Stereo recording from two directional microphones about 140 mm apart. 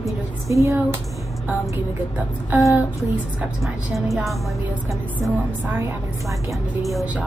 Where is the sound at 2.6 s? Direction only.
25° left (ahead or behind).